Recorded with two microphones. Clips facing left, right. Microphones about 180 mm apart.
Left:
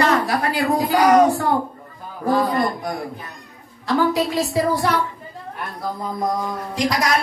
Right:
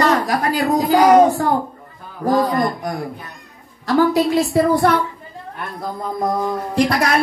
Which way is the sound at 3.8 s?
45° right (ahead or behind).